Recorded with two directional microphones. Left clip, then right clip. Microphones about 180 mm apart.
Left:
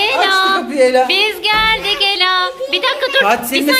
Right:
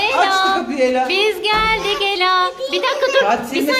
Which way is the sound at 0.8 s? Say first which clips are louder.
Left 7 dB; 35° left (ahead or behind).